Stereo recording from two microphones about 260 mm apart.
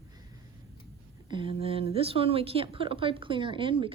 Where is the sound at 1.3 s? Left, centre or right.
Centre.